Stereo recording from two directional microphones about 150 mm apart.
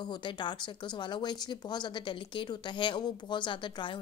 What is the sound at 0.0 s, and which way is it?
Speech, 30° left (ahead or behind).